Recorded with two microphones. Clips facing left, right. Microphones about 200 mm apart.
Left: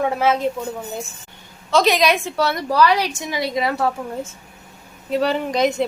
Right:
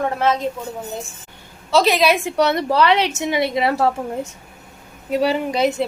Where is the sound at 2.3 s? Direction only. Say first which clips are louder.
Right 3 dB; 20° right (ahead or behind).